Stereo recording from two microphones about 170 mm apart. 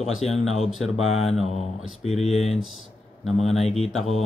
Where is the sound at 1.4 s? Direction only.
40° left (ahead or behind).